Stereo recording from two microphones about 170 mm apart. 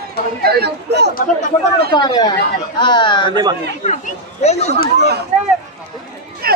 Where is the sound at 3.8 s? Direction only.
40° left (ahead or behind).